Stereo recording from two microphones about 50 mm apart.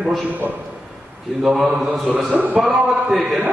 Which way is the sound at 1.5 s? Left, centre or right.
Right.